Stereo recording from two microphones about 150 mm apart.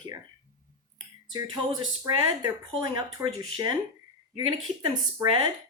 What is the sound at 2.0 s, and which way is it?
Speech, 25° right (ahead or behind).